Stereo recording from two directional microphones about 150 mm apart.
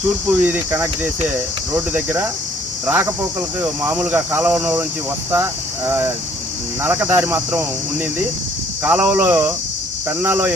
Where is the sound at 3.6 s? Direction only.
10° right (ahead or behind).